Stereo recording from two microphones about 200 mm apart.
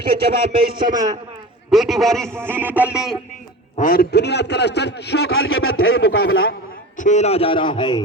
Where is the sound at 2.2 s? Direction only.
10° right (ahead or behind).